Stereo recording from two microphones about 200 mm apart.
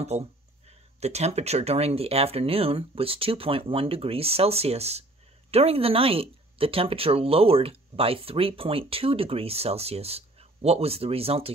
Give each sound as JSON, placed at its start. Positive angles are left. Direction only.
{"t": 0.0, "sound": "speech", "side_deg": -30}